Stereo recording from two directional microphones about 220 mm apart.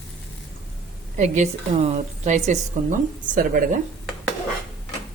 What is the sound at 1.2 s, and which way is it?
A woman's voice, 30° right (ahead or behind).